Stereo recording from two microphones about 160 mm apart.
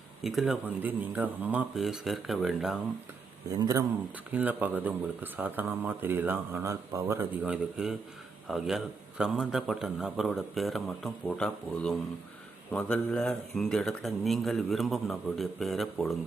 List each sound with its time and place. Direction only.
0.2 s a man's voice: centre (ahead or behind)
3.6 s a man's voice: 20° right (ahead or behind); by 16.1 s centre (ahead or behind)